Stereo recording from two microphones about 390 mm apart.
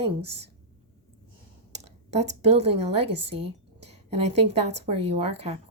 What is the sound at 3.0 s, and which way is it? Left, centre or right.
Speech, right.